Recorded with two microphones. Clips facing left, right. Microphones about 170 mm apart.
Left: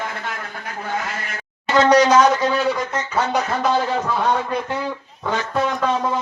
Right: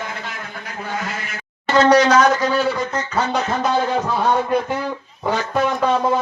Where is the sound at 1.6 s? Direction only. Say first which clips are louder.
Right 1 dB; 15° left (ahead or behind).